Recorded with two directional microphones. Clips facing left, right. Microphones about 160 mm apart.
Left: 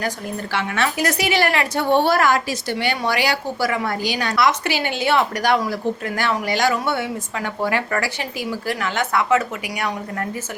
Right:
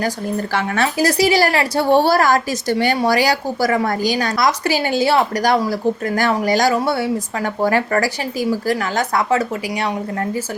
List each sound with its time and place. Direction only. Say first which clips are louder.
0.5 s a woman's voice: right 1 dB; 40° right (ahead or behind)